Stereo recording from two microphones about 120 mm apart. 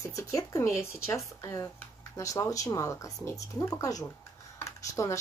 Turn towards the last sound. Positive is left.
turn(degrees=25)  # may be behind; listen again after turning